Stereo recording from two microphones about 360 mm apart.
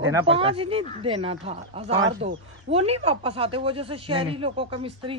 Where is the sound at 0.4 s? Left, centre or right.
Centre.